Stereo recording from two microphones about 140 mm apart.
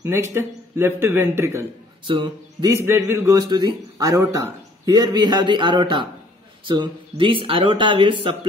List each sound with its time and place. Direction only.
0.0 s a man's voice: 15° right (ahead or behind)
2.0 s speech: 40° right (ahead or behind)
2.7 s a man's voice: 15° right (ahead or behind); by 8.4 s 35° right (ahead or behind)